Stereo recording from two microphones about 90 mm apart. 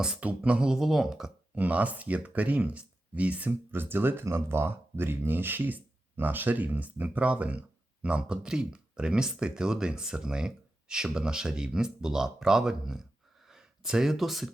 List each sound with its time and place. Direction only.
0.0 s speech: 15° right (ahead or behind)
1.5 s speech: 15° right (ahead or behind)